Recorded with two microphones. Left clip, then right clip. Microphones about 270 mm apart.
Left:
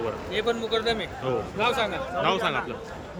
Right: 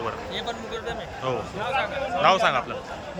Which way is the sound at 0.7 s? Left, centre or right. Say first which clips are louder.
Left 6 dB; left.